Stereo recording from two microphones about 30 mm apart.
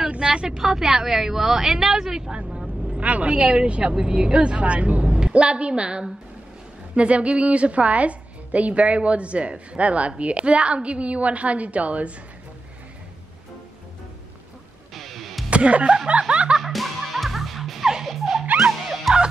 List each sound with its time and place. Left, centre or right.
0.1 s a woman's voice: right
2.6 s a woman's voice: right
4.4 s a woman's voice: right
5.0 s a sound: right
5.4 s a woman's voice: right
15.0 s music: centre
15.5 s a woman's voice: right
16.7 s music: centre
19.1 s fowl: centre